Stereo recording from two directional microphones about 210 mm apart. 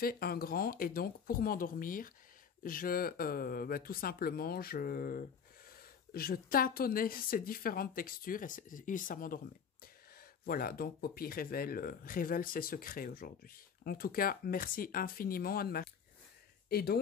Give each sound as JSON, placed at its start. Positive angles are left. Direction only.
{"t": 0.0, "sound": "speech", "side_deg": 45}
{"t": 10.4, "sound": "speech", "side_deg": 45}